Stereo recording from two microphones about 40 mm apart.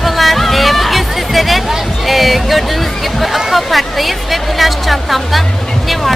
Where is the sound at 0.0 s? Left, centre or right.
Centre.